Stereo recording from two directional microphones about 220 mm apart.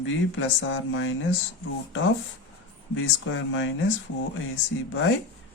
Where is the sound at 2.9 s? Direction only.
60° left (ahead or behind).